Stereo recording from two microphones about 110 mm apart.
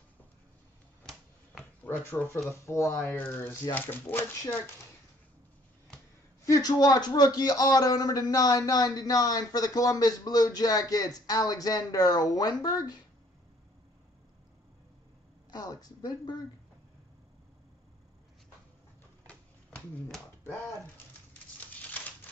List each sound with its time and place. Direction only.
1.0 s finger snapping: 5° left (ahead or behind)
1.9 s speech: 20° left (ahead or behind)
6.4 s a man's voice: 35° left (ahead or behind)
15.5 s a man's voice: 35° left (ahead or behind)
19.2 s a sound: 10° left (ahead or behind)